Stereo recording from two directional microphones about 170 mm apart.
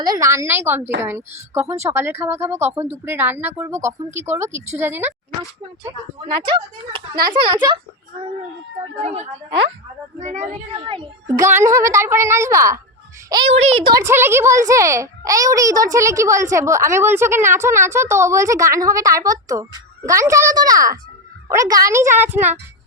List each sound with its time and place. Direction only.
0.0 s a child's voice: 20° right (ahead or behind)
6.3 s speech: 30° right (ahead or behind)
9.0 s a woman's voice: 40° right (ahead or behind)
10.8 s speech: 30° right (ahead or behind)
11.4 s a child's voice: 15° right (ahead or behind)
13.5 s a woman's voice: 35° right (ahead or behind)
13.9 s a child's voice: 15° right (ahead or behind)